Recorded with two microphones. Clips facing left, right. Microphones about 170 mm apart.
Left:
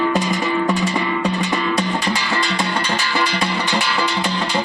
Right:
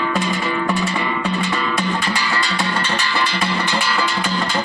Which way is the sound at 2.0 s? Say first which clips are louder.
Left 1 dB; 15° left (ahead or behind).